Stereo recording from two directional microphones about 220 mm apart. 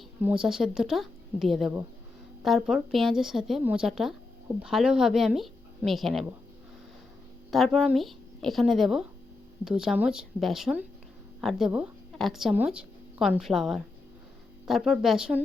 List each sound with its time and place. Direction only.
0.2 s speech: 5° right (ahead or behind)
7.5 s speech: centre (ahead or behind)